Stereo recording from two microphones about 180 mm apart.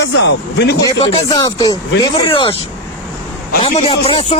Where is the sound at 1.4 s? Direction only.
20° left (ahead or behind).